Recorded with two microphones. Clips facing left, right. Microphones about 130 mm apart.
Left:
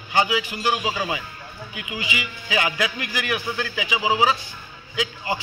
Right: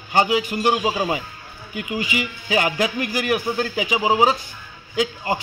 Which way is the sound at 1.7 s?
45° right (ahead or behind).